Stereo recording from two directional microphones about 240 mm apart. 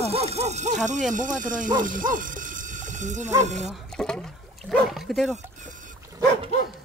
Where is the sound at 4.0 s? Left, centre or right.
Centre.